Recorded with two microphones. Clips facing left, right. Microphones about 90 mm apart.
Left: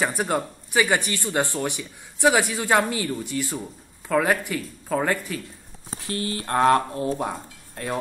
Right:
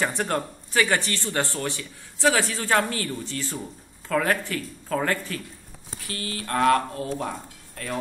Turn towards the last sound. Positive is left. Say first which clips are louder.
# left 3 dB
turn(degrees=25)  # may be behind; listen again after turning